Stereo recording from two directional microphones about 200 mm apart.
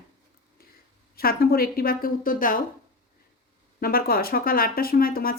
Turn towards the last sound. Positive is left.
turn(degrees=45)  # may be behind; listen again after turning